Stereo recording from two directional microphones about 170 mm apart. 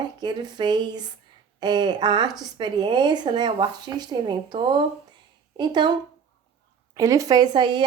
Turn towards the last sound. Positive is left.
turn(degrees=-25)  # may be behind; listen again after turning